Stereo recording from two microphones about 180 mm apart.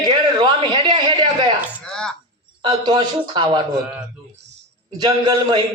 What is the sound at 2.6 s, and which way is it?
Speech, 25° right (ahead or behind).